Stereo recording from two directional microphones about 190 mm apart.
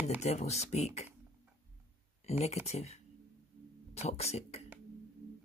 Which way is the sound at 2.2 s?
35° left (ahead or behind).